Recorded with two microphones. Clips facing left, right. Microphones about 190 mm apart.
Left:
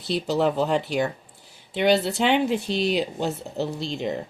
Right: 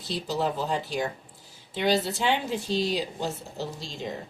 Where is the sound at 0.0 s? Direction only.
65° left (ahead or behind).